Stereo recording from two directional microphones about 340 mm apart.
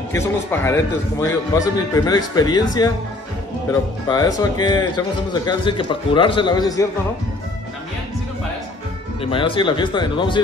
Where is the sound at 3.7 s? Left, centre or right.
Centre.